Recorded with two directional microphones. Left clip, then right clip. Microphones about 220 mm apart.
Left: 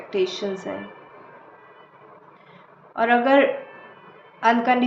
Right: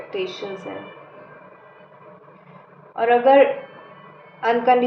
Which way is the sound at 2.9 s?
50° left (ahead or behind).